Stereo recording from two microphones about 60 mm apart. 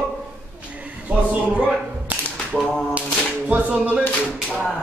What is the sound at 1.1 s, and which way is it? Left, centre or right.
Speech, right.